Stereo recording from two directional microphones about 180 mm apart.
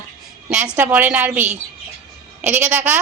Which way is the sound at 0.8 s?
10° right (ahead or behind).